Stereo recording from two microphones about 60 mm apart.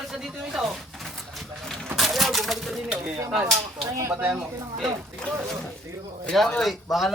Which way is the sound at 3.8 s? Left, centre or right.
Right.